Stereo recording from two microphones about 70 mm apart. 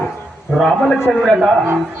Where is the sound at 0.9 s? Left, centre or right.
Centre.